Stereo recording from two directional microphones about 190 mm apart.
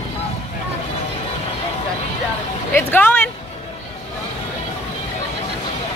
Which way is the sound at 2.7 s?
10° left (ahead or behind).